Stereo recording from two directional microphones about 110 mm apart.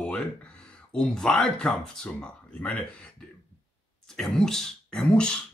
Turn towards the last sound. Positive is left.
turn(degrees=10)  # may be behind; listen again after turning